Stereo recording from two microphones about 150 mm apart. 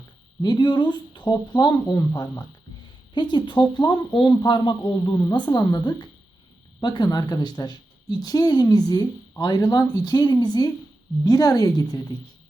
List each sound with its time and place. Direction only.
0.4 s a woman's voice: 30° left (ahead or behind)